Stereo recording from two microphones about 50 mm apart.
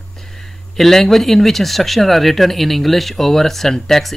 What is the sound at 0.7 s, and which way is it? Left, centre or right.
Speech, centre.